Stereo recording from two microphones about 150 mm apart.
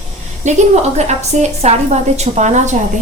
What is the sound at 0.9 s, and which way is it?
A woman's voice, 50° right (ahead or behind).